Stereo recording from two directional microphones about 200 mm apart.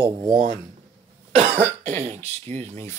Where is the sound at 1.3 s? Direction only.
30° right (ahead or behind).